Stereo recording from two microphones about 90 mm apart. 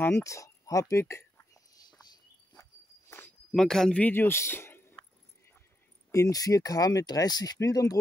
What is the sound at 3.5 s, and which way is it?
Speech, 5° left (ahead or behind).